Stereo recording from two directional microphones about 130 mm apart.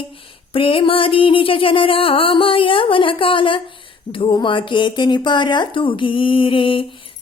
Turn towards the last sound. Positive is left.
turn(degrees=40)  # may be behind; listen again after turning